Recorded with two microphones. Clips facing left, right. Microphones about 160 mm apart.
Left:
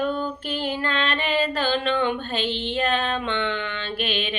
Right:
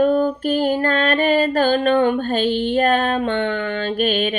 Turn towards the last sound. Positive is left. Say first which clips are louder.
# right 8 dB
turn(degrees=-45)  # may be behind; listen again after turning